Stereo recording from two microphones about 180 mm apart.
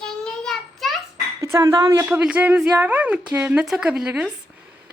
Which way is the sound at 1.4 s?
15° right (ahead or behind).